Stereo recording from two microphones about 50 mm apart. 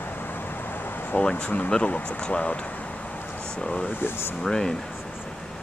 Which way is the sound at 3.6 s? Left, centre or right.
Centre.